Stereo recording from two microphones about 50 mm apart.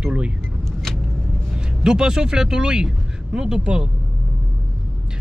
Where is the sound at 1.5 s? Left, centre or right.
Centre.